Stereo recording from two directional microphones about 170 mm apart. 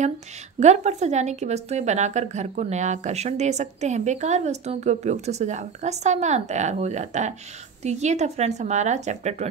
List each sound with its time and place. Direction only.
0.6 s a woman's voice: 40° right (ahead or behind)